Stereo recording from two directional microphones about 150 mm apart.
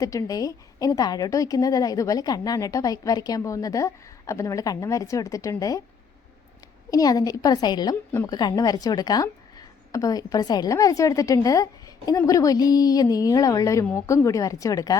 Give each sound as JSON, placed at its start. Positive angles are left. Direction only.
{"t": 0.0, "sound": "a woman's voice", "side_deg": 25}
{"t": 6.9, "sound": "a woman's voice", "side_deg": 25}